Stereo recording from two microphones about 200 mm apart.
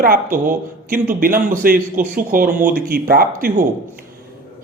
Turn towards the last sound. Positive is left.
turn(degrees=-45)  # may be behind; listen again after turning